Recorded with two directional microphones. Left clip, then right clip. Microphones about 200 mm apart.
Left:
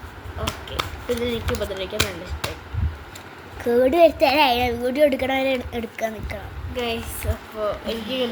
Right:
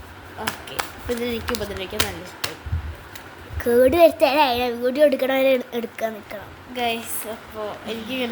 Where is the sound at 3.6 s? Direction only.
20° right (ahead or behind).